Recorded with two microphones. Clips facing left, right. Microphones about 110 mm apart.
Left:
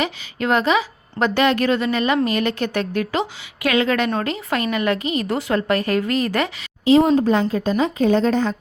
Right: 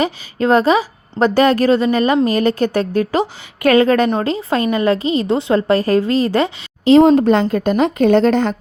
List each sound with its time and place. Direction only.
0.0 s a woman's voice: 35° right (ahead or behind)
6.8 s a woman's voice: 70° right (ahead or behind)